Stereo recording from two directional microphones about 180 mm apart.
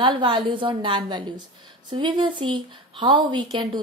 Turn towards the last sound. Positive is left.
turn(degrees=-25)  # may be behind; listen again after turning